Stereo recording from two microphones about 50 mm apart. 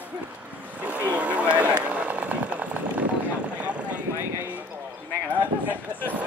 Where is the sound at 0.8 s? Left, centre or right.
Right.